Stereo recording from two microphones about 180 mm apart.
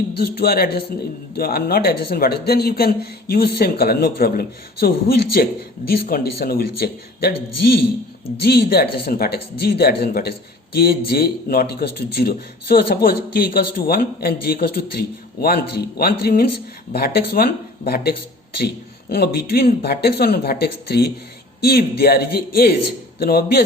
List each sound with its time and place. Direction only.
0.2 s a man's voice: 60° left (ahead or behind)
19.1 s a man's voice: 60° left (ahead or behind)